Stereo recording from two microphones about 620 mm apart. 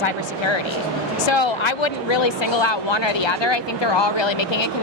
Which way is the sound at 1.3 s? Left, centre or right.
Left.